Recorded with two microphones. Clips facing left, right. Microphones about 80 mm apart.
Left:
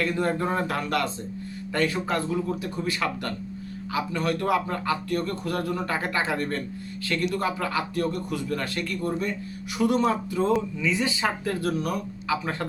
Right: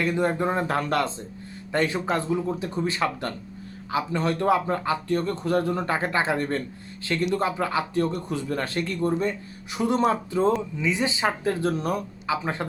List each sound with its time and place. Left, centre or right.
0.0 s speech: centre
0.7 s speech: right